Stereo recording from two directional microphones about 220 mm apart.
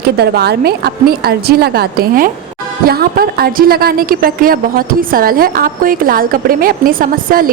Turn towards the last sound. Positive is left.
turn(degrees=-40)  # may be behind; listen again after turning